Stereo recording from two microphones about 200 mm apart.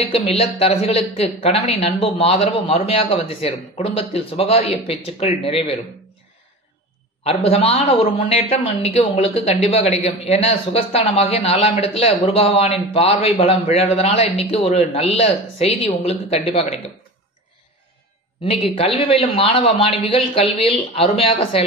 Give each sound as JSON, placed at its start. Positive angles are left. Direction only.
{"t": 0.0, "sound": "speech", "side_deg": 30}
{"t": 7.2, "sound": "a man's voice", "side_deg": 30}
{"t": 18.4, "sound": "speech", "side_deg": 25}